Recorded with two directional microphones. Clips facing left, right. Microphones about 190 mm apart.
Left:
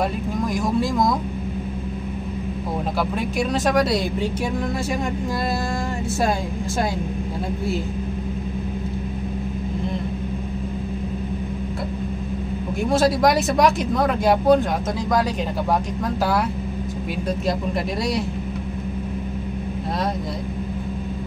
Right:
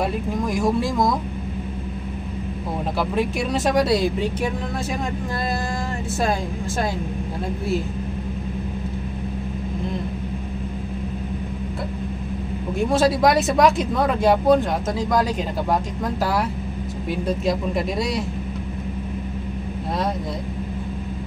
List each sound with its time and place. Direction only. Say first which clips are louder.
3.0 s speech: right 2 dB; centre (ahead or behind)
12.9 s speech: even; centre (ahead or behind)